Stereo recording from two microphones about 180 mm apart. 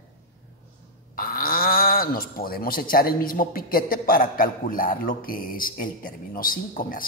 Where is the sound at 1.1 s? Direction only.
55° left (ahead or behind).